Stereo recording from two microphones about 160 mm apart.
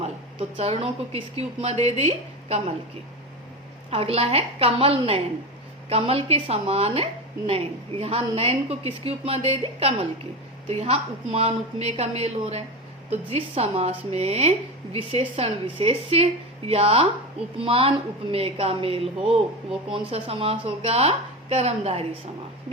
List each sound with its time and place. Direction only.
0.0 s a woman's voice: 40° right (ahead or behind)
3.8 s a woman's voice: 40° right (ahead or behind)